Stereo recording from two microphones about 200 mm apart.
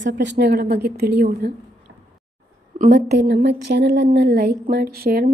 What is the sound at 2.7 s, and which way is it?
A woman's voice, 45° right (ahead or behind).